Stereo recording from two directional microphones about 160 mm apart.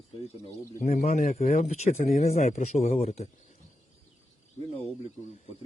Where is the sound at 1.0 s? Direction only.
50° left (ahead or behind).